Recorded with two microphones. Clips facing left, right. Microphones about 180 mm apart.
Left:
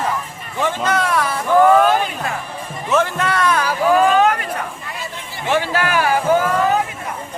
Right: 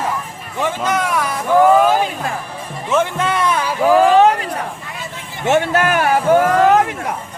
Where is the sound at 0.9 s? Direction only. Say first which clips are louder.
Left 1 dB; 15° right (ahead or behind).